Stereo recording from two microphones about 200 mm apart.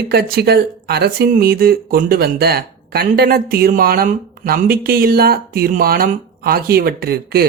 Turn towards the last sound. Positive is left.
turn(degrees=-50)  # may be behind; listen again after turning